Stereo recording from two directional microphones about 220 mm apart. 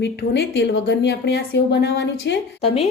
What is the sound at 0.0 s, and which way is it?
Speech, 50° left (ahead or behind).